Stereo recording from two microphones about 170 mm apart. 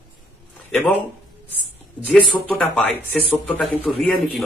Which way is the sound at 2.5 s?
10° left (ahead or behind).